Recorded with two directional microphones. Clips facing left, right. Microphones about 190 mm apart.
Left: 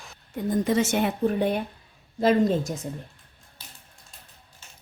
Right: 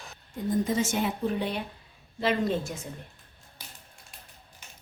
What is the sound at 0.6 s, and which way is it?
A woman's voice, 70° left (ahead or behind).